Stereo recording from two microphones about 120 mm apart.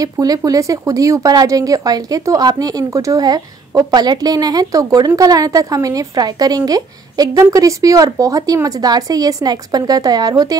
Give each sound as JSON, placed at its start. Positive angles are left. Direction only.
{"t": 0.0, "sound": "a woman's voice", "side_deg": -30}